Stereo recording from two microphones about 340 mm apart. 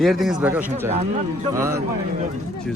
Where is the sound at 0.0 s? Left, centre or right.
Centre.